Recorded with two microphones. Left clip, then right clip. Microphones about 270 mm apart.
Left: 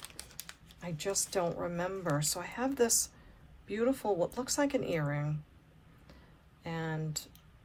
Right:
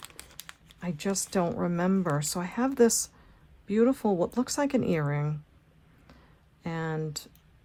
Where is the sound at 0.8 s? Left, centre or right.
Right.